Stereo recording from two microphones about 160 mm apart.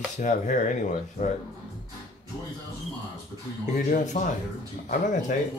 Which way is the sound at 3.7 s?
50° left (ahead or behind).